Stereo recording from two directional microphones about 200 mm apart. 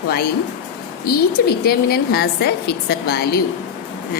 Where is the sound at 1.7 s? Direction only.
50° left (ahead or behind).